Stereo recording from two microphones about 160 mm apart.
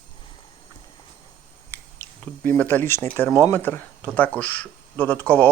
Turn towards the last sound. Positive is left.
turn(degrees=10)  # may be behind; listen again after turning